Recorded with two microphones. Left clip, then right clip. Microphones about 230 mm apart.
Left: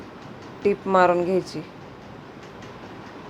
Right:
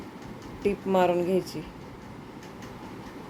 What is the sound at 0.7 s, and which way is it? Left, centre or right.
Speech, centre.